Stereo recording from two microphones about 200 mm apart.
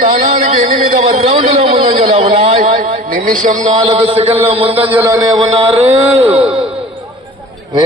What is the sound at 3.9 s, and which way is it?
A man's voice, 30° right (ahead or behind).